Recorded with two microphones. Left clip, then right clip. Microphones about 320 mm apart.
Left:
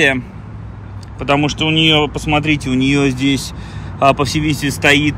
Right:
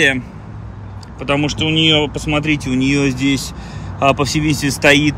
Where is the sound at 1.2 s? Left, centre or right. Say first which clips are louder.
Left 2 dB; centre.